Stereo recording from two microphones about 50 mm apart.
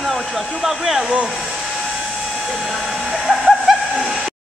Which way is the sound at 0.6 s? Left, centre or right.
Centre.